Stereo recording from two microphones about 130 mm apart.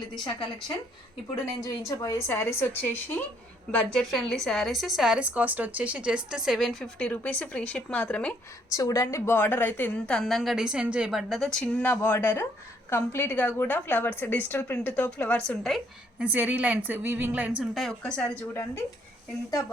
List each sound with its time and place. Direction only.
1.6 s a woman's voice: 25° left (ahead or behind)
8.7 s a woman's voice: 25° left (ahead or behind); by 15.8 s 5° left (ahead or behind)
16.1 s a woman's voice: 10° right (ahead or behind); by 18.4 s 5° left (ahead or behind)